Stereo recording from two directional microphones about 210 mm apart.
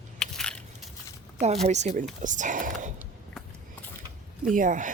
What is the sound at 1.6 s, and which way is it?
Speech, 30° right (ahead or behind).